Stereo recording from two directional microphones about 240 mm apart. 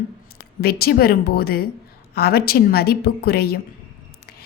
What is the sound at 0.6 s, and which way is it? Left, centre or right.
A woman's voice, left.